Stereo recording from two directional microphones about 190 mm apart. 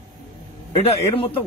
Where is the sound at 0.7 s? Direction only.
30° left (ahead or behind).